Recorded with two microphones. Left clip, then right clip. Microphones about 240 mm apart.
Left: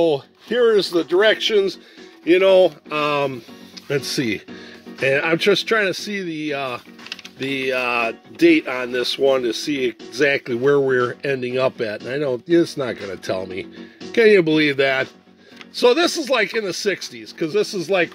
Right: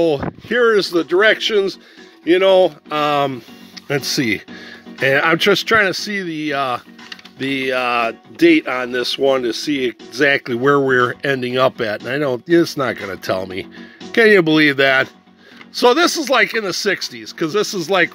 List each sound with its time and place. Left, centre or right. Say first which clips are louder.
0.0 s speech: right 2 dB; centre